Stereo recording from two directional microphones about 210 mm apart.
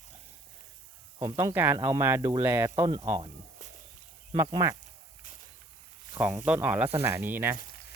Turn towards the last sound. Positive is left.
turn(degrees=-10)  # may be behind; listen again after turning